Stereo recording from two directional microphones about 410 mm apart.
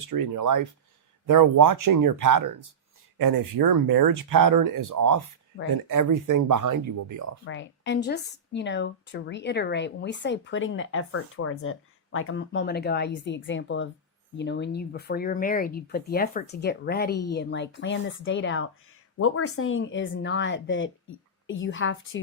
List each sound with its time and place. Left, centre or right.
0.1 s speech: right
5.5 s a woman's voice: left
5.9 s speech: right
7.4 s a woman's voice: left